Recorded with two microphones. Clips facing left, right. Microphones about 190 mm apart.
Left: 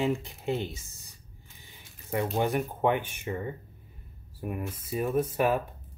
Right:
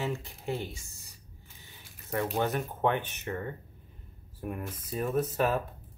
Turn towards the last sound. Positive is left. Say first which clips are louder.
# left 2 dB
turn(degrees=10)  # may be behind; listen again after turning